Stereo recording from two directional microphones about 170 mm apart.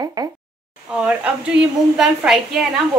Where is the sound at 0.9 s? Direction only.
5° right (ahead or behind).